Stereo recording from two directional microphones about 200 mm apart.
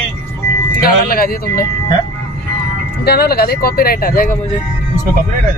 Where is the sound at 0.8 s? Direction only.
45° left (ahead or behind).